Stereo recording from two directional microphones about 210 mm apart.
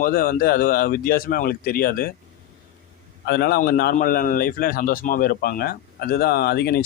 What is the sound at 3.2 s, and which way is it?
Speech, 50° left (ahead or behind).